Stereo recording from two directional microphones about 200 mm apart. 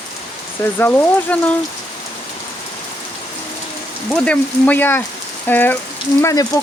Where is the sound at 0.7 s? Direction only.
10° left (ahead or behind).